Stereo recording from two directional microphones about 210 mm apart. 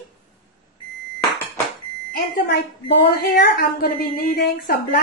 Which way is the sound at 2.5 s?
45° left (ahead or behind).